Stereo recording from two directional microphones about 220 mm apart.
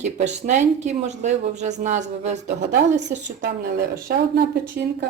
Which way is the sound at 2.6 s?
50° right (ahead or behind).